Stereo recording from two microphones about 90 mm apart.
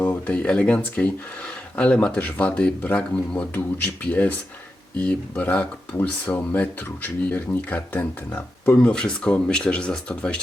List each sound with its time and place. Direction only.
0.0 s speech: 15° left (ahead or behind)